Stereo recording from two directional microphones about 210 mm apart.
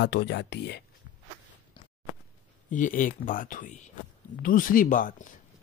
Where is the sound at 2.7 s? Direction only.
40° left (ahead or behind).